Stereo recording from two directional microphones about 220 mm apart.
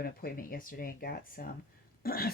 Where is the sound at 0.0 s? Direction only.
40° left (ahead or behind).